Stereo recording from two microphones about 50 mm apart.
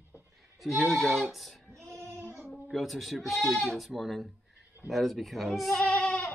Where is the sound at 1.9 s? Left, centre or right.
Right.